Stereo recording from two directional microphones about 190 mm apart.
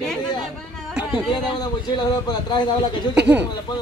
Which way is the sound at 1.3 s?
20° left (ahead or behind).